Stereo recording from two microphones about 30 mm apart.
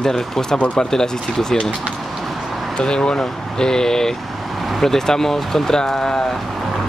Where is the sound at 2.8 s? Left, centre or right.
Left.